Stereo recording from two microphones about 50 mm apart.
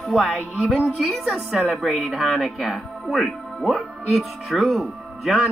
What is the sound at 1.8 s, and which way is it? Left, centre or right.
Speech, centre.